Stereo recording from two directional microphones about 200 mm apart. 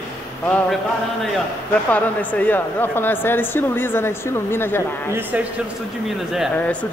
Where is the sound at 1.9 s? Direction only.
5° left (ahead or behind).